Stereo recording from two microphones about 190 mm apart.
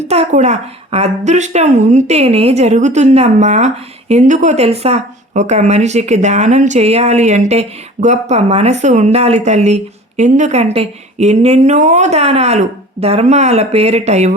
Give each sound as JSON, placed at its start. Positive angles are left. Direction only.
{"t": 0.1, "sound": "speech", "side_deg": -35}